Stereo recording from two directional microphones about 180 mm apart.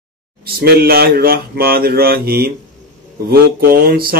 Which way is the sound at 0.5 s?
60° right (ahead or behind).